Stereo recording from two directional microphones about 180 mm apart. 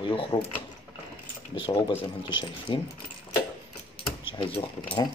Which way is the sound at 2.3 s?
25° left (ahead or behind).